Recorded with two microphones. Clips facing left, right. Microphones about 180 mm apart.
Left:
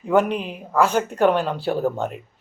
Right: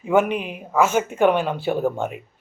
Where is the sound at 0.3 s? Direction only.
10° right (ahead or behind).